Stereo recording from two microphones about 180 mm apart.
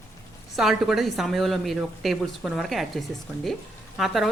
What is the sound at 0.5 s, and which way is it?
Speech, centre (ahead or behind).